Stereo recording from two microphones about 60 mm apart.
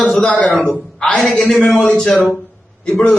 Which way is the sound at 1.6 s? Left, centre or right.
Centre.